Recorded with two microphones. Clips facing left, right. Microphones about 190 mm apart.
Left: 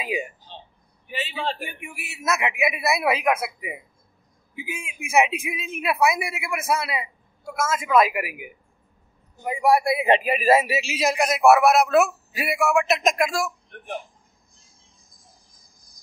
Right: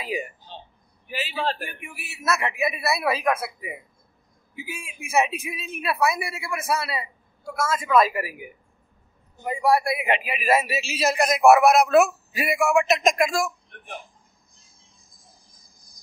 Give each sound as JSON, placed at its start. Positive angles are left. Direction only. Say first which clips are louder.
{"t": 0.0, "sound": "a man's voice", "louder": "left 1 dB", "side_deg": 15}
{"t": 1.0, "sound": "a man's voice", "louder": "right 1 dB", "side_deg": 0}
{"t": 1.6, "sound": "a man's voice", "louder": "left 1 dB", "side_deg": 15}
{"t": 9.9, "sound": "a man's voice", "louder": "left 6 dB", "side_deg": 35}
{"t": 10.5, "sound": "a man's voice", "louder": "left 2 dB", "side_deg": 25}